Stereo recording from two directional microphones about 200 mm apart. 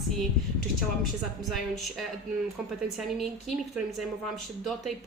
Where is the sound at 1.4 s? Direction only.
Centre (ahead or behind).